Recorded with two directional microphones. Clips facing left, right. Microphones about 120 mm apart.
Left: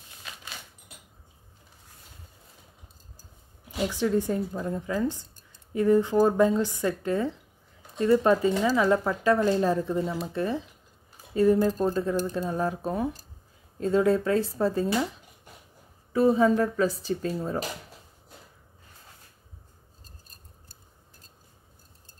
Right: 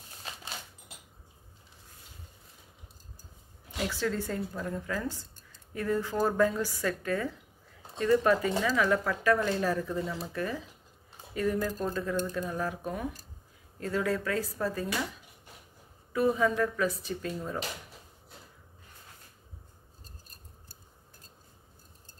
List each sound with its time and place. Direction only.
0.2 s a sound: 35° right (ahead or behind)
3.8 s speech: 20° left (ahead or behind)
16.1 s speech: 30° left (ahead or behind)